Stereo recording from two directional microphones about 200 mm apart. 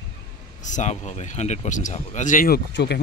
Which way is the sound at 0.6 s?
35° left (ahead or behind).